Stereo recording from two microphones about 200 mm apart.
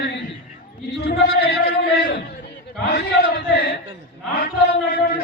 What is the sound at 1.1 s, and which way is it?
Chant, 55° left (ahead or behind).